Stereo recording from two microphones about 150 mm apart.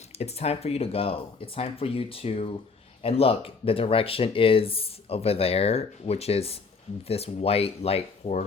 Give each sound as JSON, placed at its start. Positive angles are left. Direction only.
{"t": 0.2, "sound": "speech", "side_deg": 45}